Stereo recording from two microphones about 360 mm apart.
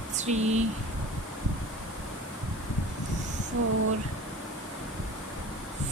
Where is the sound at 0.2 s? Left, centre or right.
Centre.